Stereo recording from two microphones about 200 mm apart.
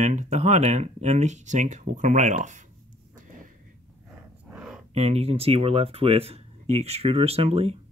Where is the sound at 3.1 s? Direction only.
40° right (ahead or behind).